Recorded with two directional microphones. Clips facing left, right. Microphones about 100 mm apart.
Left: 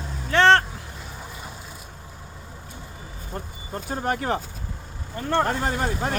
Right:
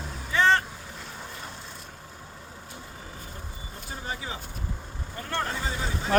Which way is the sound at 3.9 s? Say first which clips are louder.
Left 11 dB; 60° left (ahead or behind).